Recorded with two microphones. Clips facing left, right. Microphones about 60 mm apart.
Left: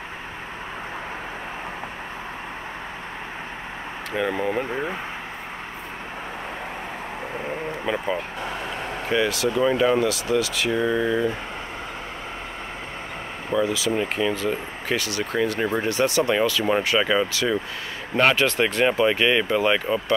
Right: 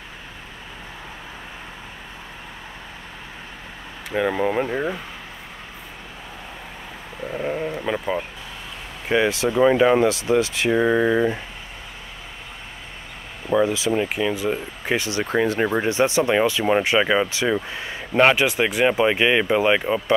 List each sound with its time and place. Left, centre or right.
4.1 s speech: centre
7.8 s vehicle: centre
9.1 s speech: right
13.7 s speech: right
13.9 s speech: centre